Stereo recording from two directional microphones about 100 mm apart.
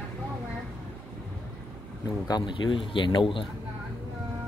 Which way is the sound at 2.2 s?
45° left (ahead or behind).